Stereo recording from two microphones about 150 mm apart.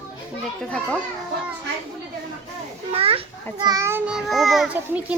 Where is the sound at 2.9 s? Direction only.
40° right (ahead or behind).